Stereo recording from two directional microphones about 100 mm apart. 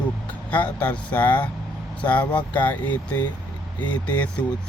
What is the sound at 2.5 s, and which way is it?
Speech, 15° left (ahead or behind).